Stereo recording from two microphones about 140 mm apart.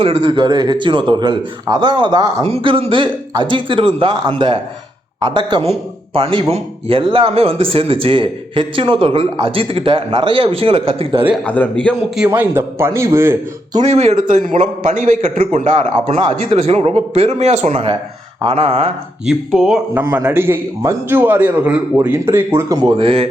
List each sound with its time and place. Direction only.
0.0 s speech: 40° right (ahead or behind)
11.4 s a man's voice: 10° left (ahead or behind)
12.3 s a man's voice: 15° right (ahead or behind)
13.7 s a man's voice: 50° right (ahead or behind)
15.4 s speech: 55° right (ahead or behind)
19.2 s speech: centre (ahead or behind)
19.9 s a man's voice: 15° right (ahead or behind)
23.0 s speech: 40° right (ahead or behind)